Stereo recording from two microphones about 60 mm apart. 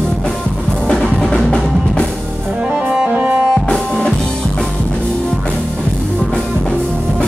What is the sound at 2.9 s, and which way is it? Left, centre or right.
Music, centre.